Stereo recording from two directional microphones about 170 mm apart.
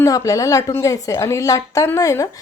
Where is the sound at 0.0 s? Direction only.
20° left (ahead or behind).